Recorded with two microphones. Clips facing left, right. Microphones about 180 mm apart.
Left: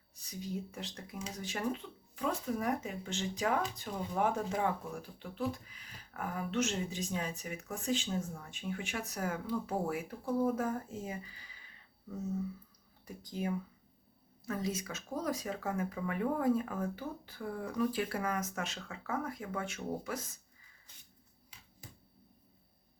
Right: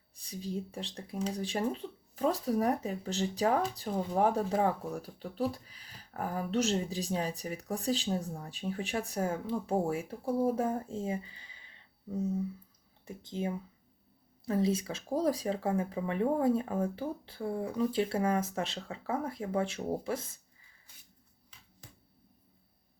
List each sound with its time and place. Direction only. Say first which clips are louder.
0.2 s speech: right 3 dB; 30° right (ahead or behind)